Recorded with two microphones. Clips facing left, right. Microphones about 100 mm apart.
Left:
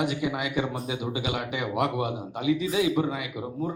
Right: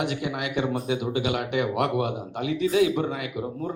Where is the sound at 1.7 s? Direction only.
60° right (ahead or behind).